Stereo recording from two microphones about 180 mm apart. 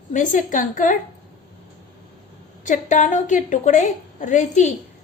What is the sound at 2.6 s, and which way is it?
A woman's voice, 45° left (ahead or behind).